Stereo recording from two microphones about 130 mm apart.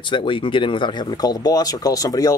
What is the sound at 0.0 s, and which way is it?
Speech, 40° left (ahead or behind).